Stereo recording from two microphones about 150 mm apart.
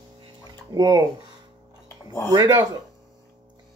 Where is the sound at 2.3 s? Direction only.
20° right (ahead or behind).